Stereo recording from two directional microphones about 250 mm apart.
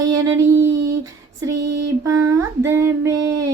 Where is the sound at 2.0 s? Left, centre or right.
Centre.